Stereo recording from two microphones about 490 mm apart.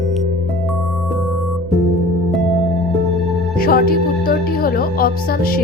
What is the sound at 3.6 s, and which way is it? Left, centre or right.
Speech, centre.